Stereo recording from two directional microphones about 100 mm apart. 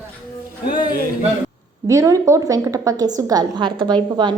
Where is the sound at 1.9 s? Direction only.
35° right (ahead or behind).